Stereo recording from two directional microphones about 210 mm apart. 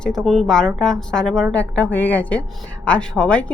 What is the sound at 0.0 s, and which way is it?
A woman's voice, centre (ahead or behind).